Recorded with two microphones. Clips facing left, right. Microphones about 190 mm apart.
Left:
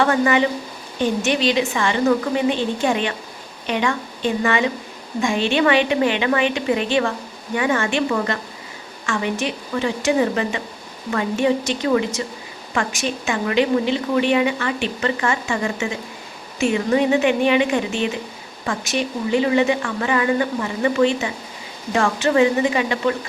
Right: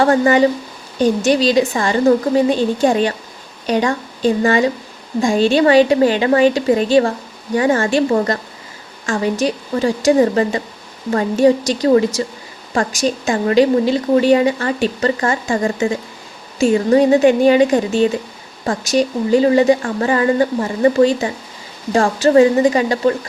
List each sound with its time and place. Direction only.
0.0 s a woman's voice: 40° right (ahead or behind)